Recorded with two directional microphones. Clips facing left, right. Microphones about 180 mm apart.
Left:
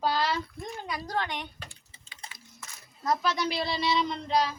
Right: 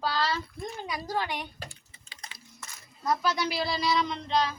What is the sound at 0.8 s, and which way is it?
Speech, 5° right (ahead or behind).